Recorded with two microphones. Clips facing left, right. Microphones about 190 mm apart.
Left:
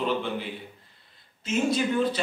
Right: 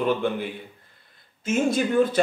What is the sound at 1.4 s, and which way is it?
Speech, 50° right (ahead or behind).